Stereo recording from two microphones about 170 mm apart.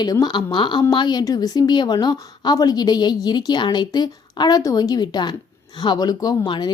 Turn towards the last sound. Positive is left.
turn(degrees=25)  # may be behind; listen again after turning